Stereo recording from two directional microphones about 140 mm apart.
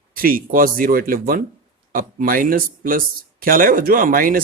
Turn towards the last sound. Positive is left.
turn(degrees=-90)